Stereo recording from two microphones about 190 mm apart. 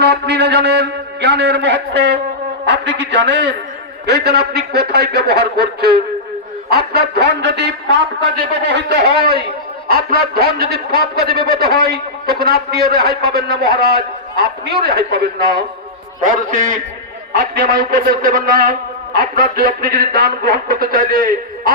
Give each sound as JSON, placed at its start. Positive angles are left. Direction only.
{"t": 0.0, "sound": "a sound", "side_deg": -60}
{"t": 4.0, "sound": "a man's voice", "side_deg": -60}
{"t": 16.2, "sound": "a man's voice", "side_deg": -45}